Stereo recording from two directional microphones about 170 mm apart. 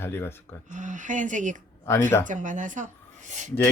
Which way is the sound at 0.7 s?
45° right (ahead or behind).